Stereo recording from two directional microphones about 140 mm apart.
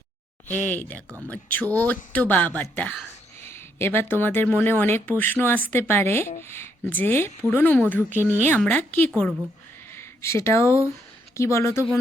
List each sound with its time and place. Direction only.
0.5 s speech: 10° left (ahead or behind)